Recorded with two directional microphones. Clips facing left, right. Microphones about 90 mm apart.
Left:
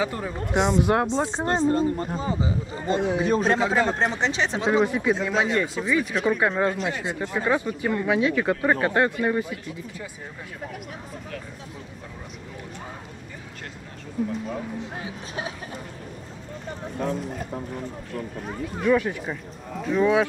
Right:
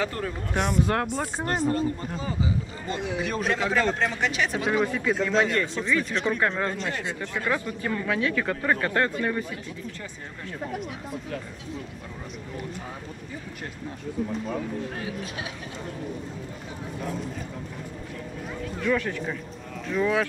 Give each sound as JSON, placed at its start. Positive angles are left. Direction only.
{"t": 0.0, "sound": "speech", "side_deg": 15}
{"t": 14.8, "sound": "speech", "side_deg": 20}
{"t": 15.3, "sound": "speech", "side_deg": 35}
{"t": 18.8, "sound": "speech", "side_deg": 15}